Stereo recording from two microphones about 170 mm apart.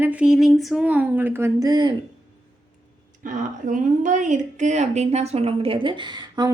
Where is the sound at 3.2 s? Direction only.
50° right (ahead or behind); by 6.5 s 25° right (ahead or behind).